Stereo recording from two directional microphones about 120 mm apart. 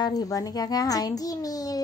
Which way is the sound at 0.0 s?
30° left (ahead or behind).